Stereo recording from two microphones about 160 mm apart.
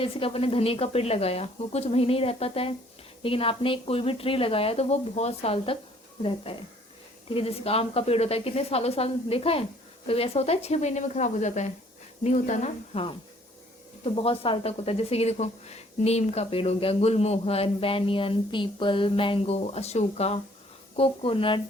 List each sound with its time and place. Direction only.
0.0 s a woman's voice: 35° left (ahead or behind)